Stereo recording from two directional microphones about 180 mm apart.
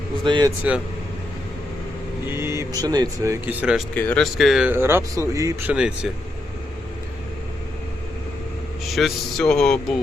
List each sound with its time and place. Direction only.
0.3 s speech: 25° right (ahead or behind)
2.2 s speech: 15° right (ahead or behind)
3.4 s speech: 5° right (ahead or behind)
3.9 s speech: 10° left (ahead or behind)
4.7 s speech: 15° right (ahead or behind)
8.9 s speech: centre (ahead or behind)